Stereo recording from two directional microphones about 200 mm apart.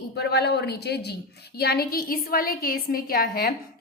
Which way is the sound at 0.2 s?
55° left (ahead or behind).